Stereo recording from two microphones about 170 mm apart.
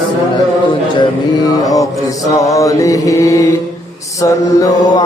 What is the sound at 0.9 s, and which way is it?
Mantra, 25° left (ahead or behind).